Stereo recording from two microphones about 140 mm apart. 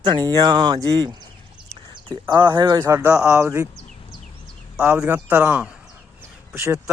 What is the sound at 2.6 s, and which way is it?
Speech, 30° right (ahead or behind).